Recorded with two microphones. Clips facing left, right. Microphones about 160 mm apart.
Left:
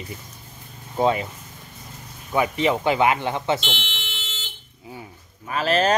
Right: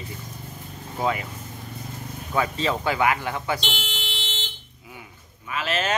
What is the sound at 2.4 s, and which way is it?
Speech, 20° left (ahead or behind).